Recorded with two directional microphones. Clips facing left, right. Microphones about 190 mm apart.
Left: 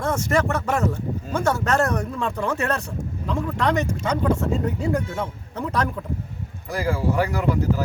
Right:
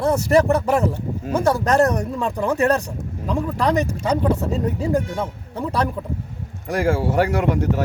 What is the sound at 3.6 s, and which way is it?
Speech, 35° right (ahead or behind).